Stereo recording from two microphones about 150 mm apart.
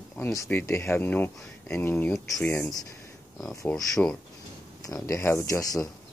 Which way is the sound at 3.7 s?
10° left (ahead or behind).